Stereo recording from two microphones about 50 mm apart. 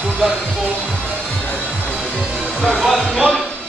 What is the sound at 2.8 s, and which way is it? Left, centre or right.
Speech, centre.